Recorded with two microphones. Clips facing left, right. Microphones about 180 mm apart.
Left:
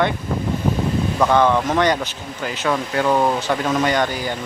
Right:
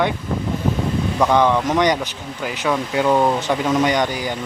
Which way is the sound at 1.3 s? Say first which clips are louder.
Even; 15° right (ahead or behind).